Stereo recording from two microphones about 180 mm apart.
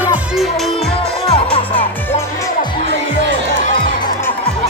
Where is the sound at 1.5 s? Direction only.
30° left (ahead or behind).